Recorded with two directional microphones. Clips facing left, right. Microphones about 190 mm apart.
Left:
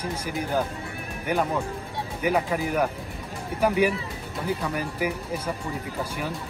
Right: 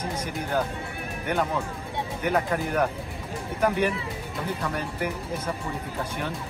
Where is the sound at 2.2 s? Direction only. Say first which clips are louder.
Left 1 dB; 10° left (ahead or behind).